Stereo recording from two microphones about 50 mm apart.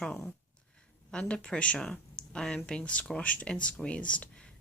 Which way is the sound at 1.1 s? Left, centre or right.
Centre.